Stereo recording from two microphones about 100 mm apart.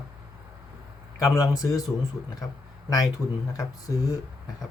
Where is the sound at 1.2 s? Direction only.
35° left (ahead or behind).